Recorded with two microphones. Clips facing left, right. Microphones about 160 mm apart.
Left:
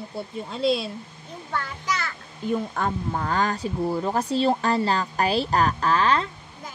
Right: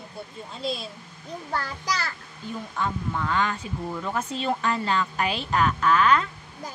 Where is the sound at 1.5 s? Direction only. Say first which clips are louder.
Left 1 dB; 35° right (ahead or behind).